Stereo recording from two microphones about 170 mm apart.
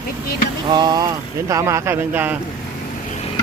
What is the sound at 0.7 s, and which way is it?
A man's voice, 25° right (ahead or behind).